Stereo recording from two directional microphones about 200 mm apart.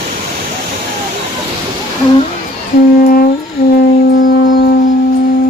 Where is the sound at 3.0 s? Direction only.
45° left (ahead or behind).